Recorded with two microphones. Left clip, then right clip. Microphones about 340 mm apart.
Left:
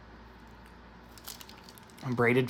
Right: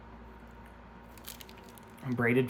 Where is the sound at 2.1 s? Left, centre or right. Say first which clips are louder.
Left 3 dB; centre.